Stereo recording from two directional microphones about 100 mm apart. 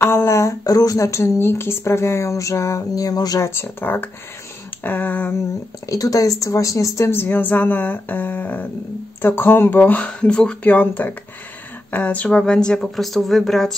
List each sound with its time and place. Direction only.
0.0 s a woman's voice: 25° left (ahead or behind)
3.4 s a woman's voice: 20° left (ahead or behind)
5.9 s a woman's voice: 35° left (ahead or behind); by 13.7 s 5° left (ahead or behind)